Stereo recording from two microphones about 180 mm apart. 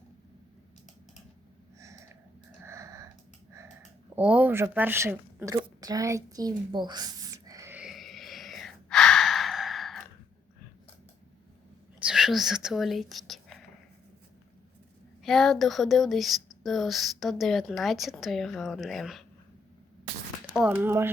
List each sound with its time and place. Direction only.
2.6 s wheeze: 15° right (ahead or behind)
4.1 s speech: 5° right (ahead or behind)
7.8 s gasp: centre (ahead or behind)
11.9 s speech: 5° right (ahead or behind)
15.2 s speech: centre (ahead or behind)
20.6 s speech: 10° right (ahead or behind)